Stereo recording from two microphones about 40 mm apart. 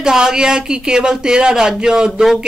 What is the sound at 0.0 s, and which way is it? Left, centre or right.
A man's voice, centre.